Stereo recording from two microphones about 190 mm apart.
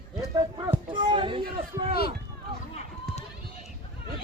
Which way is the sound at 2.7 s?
35° left (ahead or behind).